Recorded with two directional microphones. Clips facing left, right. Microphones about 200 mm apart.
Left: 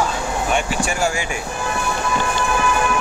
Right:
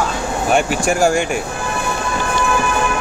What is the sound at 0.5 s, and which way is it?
Speech, 45° right (ahead or behind).